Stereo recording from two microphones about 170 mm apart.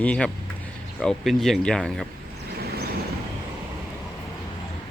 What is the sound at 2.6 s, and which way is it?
Vehicle, 70° right (ahead or behind).